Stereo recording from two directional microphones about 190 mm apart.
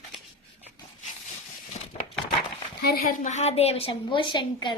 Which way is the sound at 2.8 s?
50° left (ahead or behind).